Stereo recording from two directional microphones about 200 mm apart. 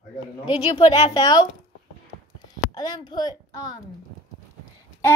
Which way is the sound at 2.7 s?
20° left (ahead or behind).